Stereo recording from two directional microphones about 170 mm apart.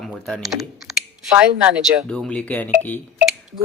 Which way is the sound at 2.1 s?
5° left (ahead or behind).